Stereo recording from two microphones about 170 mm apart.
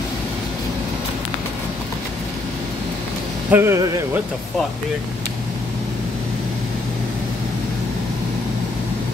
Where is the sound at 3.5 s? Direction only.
15° right (ahead or behind).